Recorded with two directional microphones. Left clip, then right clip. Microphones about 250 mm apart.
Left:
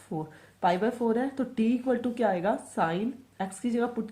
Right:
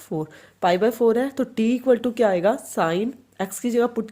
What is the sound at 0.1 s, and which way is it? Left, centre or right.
Speech, right.